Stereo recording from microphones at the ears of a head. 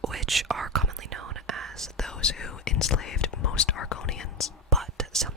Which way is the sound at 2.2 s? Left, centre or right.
Left.